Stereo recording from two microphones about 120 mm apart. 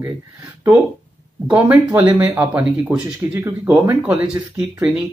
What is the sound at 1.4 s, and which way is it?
Speech, 10° right (ahead or behind).